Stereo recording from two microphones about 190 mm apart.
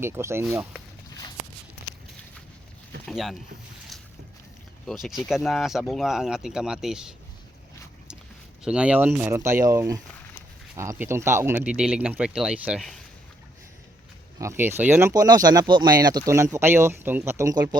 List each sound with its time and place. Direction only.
0.0 s speech: 15° right (ahead or behind)
3.1 s speech: centre (ahead or behind)
4.9 s speech: centre (ahead or behind)
8.6 s speech: 5° right (ahead or behind)
14.3 s speech: 15° right (ahead or behind)